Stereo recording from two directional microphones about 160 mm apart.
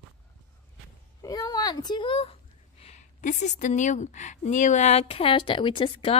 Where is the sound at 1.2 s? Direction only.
25° left (ahead or behind).